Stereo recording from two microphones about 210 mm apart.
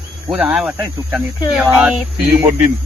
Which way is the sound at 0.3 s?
5° right (ahead or behind).